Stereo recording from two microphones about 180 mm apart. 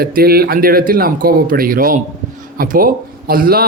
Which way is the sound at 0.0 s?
55° right (ahead or behind).